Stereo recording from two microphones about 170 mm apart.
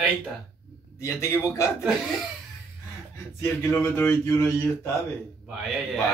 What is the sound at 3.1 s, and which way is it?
Speech, 15° left (ahead or behind).